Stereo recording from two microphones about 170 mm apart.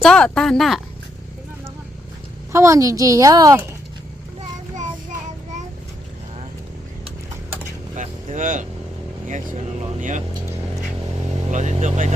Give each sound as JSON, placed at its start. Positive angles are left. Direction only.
{"t": 0.0, "sound": "a woman's voice", "side_deg": 5}
{"t": 2.5, "sound": "a woman's voice", "side_deg": -15}
{"t": 7.9, "sound": "vehicle", "side_deg": -45}
{"t": 10.0, "sound": "speech", "side_deg": -45}
{"t": 11.5, "sound": "speech", "side_deg": -45}